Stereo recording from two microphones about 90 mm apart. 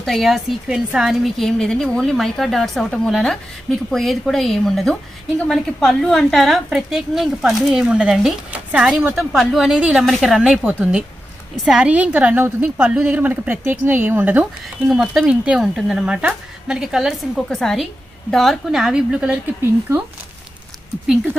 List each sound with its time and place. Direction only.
0.0 s a woman's voice: centre (ahead or behind)
9.7 s speech: 10° right (ahead or behind)
10.0 s a woman's voice: centre (ahead or behind)
10.6 s speech: 15° right (ahead or behind)
14.9 s speech: 5° right (ahead or behind)
17.5 s a woman's voice: 5° left (ahead or behind)